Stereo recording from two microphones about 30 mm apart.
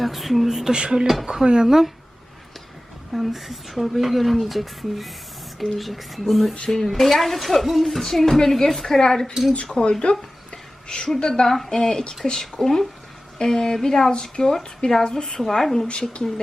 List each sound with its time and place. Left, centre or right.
0.0 s speech: centre
0.4 s speech: centre
0.7 s speech: right
1.2 s speech: centre
3.1 s speech: centre
6.7 s speech: centre
10.0 s a sound: left
11.2 s a woman's voice: left
11.4 s speech: centre
12.5 s speech: centre
13.4 s a woman's voice: left
14.1 s speech: left